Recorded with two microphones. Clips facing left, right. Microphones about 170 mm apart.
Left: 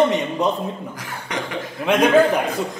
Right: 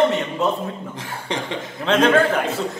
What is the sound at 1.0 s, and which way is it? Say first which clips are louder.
Speech: right 1 dB; 25° right (ahead or behind).